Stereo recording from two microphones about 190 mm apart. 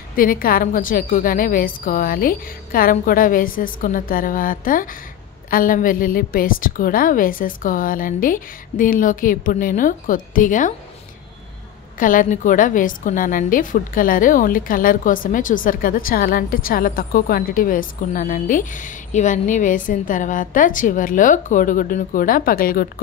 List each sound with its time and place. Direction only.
0.1 s a woman's voice: 50° left (ahead or behind)
12.0 s a woman's voice: 45° left (ahead or behind)